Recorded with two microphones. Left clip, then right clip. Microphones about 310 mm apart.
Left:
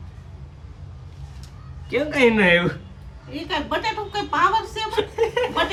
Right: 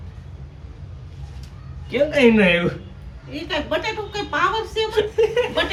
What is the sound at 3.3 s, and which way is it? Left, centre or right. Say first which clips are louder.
A woman's voice: right 1 dB; left.